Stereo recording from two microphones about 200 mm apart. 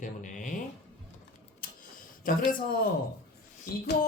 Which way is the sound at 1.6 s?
50° left (ahead or behind).